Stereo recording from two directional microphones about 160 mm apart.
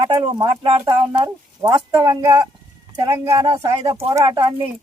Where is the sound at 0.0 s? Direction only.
25° right (ahead or behind).